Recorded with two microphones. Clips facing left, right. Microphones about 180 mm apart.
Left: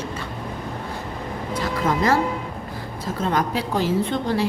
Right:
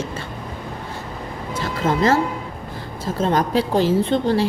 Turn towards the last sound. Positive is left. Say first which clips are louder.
# right 4 dB
turn(degrees=-30)  # may be behind; listen again after turning